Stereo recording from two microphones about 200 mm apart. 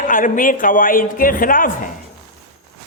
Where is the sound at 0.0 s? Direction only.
40° left (ahead or behind).